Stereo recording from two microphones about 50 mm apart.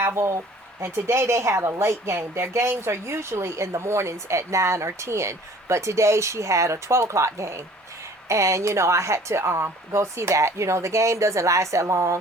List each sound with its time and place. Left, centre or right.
0.0 s speech: right
8.3 s speech: right